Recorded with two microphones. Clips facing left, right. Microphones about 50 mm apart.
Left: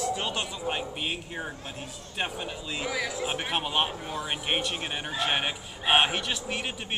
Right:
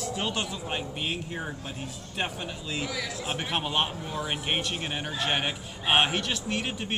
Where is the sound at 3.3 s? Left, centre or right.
Centre.